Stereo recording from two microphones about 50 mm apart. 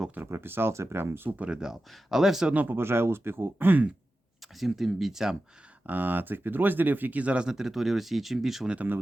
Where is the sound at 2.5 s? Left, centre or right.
Right.